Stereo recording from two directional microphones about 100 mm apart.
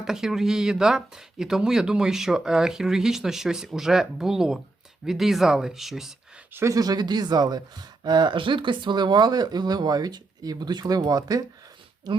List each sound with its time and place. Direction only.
0.0 s speech: 5° right (ahead or behind)
6.5 s speech: 25° right (ahead or behind)
6.7 s speech: 40° right (ahead or behind)